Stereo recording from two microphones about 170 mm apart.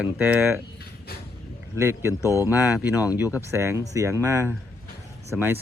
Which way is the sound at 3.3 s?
15° right (ahead or behind).